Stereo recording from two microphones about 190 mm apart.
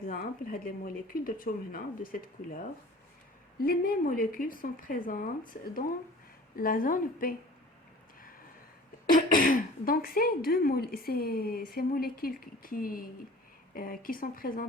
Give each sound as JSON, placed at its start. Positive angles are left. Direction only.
{"t": 0.0, "sound": "speech", "side_deg": 50}
{"t": 9.1, "sound": "speech", "side_deg": 45}